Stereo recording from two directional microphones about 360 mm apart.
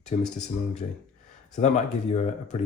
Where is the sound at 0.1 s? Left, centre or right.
Centre.